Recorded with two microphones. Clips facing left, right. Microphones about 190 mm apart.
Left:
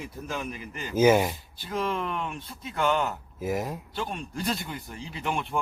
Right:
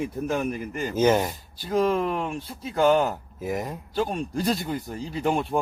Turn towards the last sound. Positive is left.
turn(degrees=-35)  # may be behind; listen again after turning